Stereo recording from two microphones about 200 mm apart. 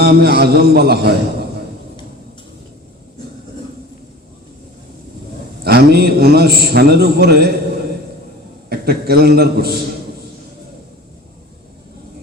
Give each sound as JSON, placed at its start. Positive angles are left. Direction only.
{"t": 0.0, "sound": "a man's voice", "side_deg": -50}
{"t": 5.6, "sound": "a man's voice", "side_deg": -50}
{"t": 8.7, "sound": "a man's voice", "side_deg": -50}